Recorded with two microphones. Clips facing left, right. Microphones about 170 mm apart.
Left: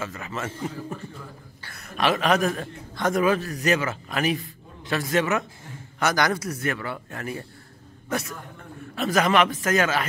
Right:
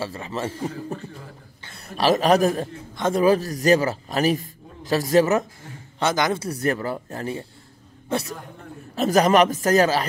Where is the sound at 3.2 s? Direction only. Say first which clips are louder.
Right 6 dB; 35° right (ahead or behind).